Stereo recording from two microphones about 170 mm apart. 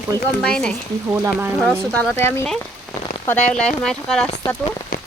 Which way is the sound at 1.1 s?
15° right (ahead or behind).